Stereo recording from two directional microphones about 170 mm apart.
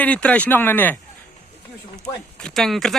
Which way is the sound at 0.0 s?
5° left (ahead or behind).